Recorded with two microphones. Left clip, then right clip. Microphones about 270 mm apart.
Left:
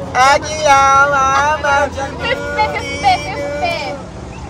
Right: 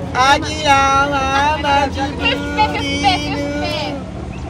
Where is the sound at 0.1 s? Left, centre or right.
Left.